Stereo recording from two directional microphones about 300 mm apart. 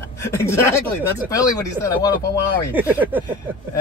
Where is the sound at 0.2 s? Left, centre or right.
Centre.